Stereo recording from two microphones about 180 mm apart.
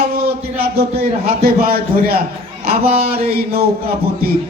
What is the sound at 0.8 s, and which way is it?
A man's voice, 60° right (ahead or behind).